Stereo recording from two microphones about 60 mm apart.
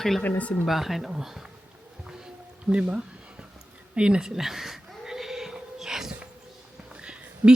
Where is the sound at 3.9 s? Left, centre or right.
Centre.